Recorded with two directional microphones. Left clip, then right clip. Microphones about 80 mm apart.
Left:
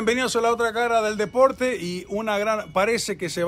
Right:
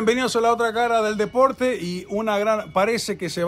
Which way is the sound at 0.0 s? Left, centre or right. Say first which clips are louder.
Right 2 dB; centre.